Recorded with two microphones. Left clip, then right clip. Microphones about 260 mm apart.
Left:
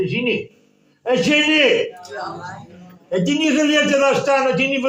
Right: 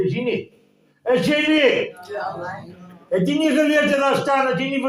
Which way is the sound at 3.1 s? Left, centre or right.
Left.